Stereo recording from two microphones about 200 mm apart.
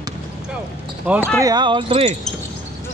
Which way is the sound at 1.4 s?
20° right (ahead or behind).